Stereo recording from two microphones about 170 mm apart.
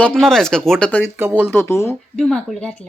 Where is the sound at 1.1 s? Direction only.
10° right (ahead or behind).